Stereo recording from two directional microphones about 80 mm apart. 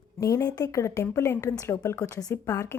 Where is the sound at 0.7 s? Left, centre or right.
Left.